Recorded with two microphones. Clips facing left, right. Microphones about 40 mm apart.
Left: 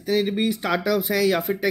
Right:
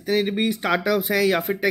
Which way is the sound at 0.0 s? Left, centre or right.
Right.